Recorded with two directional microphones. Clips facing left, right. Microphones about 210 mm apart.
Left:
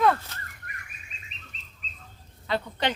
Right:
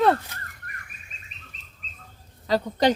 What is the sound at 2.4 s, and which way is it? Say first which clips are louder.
Speech: right 7 dB; 40° right (ahead or behind).